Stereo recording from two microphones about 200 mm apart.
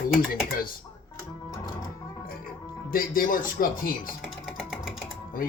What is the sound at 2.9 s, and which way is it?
Speech, 45° left (ahead or behind).